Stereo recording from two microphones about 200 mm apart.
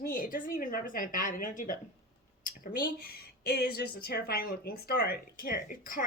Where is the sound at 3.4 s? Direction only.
55° left (ahead or behind).